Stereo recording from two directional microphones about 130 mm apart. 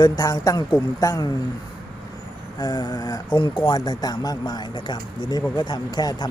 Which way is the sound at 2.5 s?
30° left (ahead or behind).